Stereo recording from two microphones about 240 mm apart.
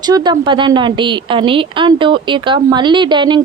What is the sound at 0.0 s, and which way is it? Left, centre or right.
Speech, centre.